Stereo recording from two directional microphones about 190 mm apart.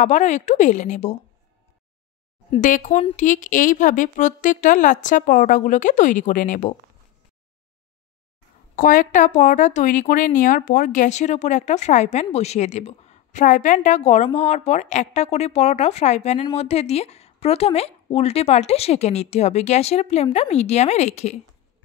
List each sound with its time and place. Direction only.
0.0 s speech: 40° left (ahead or behind)
2.6 s speech: 40° left (ahead or behind)
8.7 s speech: 45° left (ahead or behind)